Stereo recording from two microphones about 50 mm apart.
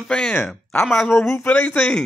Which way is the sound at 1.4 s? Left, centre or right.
Left.